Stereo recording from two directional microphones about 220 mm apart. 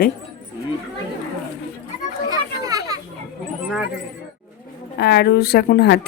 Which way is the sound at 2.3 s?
15° right (ahead or behind).